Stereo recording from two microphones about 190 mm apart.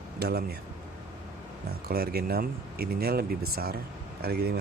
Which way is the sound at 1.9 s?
55° right (ahead or behind).